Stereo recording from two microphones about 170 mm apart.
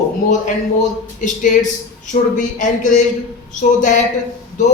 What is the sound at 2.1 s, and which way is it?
Speech, 50° left (ahead or behind).